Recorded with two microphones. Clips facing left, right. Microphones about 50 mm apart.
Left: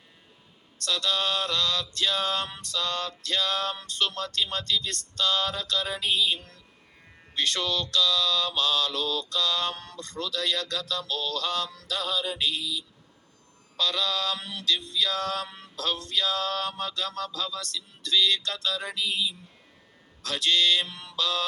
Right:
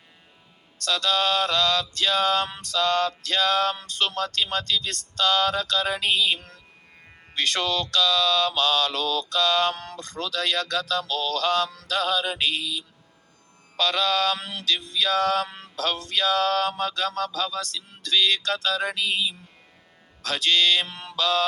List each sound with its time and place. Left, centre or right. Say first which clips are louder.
0.9 s male singing: right 4 dB; right